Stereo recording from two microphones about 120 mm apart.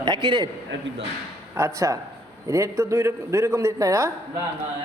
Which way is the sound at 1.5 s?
25° right (ahead or behind).